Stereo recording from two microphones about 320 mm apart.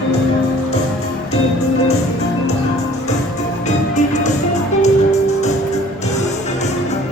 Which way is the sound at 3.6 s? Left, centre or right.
Left.